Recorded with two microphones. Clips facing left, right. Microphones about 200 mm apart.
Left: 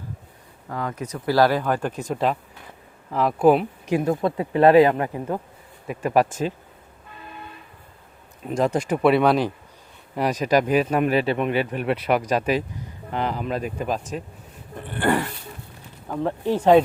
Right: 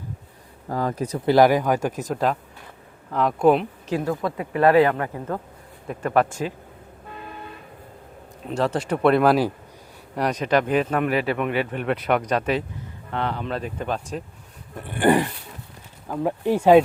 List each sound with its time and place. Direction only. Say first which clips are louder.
0.7 s speech: right 4 dB; 35° right (ahead or behind); by 1.9 s 10° right (ahead or behind)
2.0 s speech: even; centre (ahead or behind)
3.8 s a man's voice: left 4 dB; 15° left (ahead or behind)
4.1 s a man's voice: left 3 dB; 25° left (ahead or behind)
8.4 s a man's voice: left 2 dB; 10° left (ahead or behind)
11.0 s speech: left 2 dB; 25° left (ahead or behind)
11.7 s a man's voice: left 1 dB; 5° left (ahead or behind)
14.9 s speech: right 4 dB; 15° right (ahead or behind)
16.0 s speech: right 1 dB; 5° right (ahead or behind)